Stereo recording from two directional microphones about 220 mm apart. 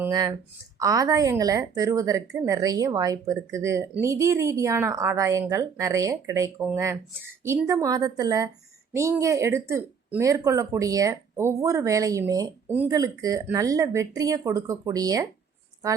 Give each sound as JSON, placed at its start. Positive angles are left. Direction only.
{"t": 0.0, "sound": "speech", "side_deg": -15}